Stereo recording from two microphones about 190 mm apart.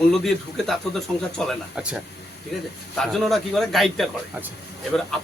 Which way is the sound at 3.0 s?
Centre (ahead or behind).